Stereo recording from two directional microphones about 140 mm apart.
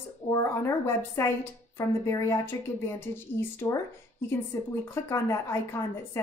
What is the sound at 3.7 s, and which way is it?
A woman's voice, 20° left (ahead or behind).